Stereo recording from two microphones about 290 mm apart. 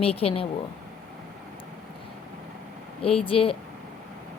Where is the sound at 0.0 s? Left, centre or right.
Centre.